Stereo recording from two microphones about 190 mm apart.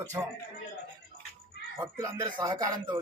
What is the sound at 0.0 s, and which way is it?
Speech, 15° right (ahead or behind).